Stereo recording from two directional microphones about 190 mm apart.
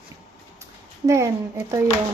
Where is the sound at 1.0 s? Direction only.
15° right (ahead or behind).